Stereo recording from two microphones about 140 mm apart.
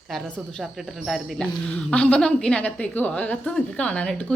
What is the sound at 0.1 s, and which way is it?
Speech, 5° left (ahead or behind).